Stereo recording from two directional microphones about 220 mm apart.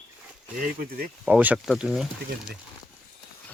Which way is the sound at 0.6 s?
40° right (ahead or behind).